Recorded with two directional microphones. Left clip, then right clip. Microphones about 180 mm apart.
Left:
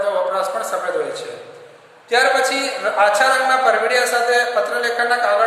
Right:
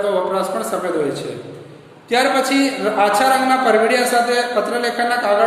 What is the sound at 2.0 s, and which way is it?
A man's voice, 15° right (ahead or behind).